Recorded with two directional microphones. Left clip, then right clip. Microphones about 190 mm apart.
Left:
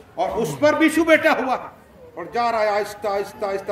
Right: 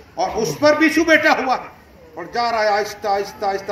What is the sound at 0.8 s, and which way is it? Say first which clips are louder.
Speech: right 2 dB; 40° left (ahead or behind).